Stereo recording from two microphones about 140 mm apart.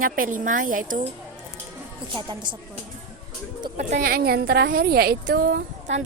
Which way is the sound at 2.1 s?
35° right (ahead or behind).